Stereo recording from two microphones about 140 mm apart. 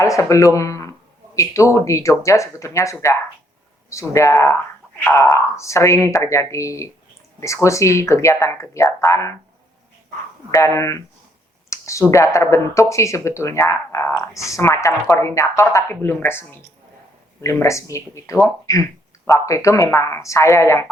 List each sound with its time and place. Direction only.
0.0 s speech: 20° left (ahead or behind)
10.5 s speech: 20° left (ahead or behind)
11.7 s a sound: 20° left (ahead or behind)
12.1 s speech: 20° left (ahead or behind)